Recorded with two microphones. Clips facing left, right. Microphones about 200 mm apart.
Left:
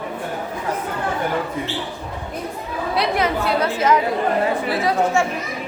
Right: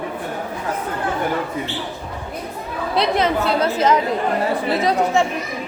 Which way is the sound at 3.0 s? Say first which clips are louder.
Right 3 dB; 20° right (ahead or behind).